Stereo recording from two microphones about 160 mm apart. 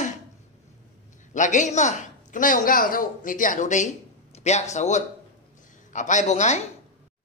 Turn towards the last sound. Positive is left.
turn(degrees=45)  # may be behind; listen again after turning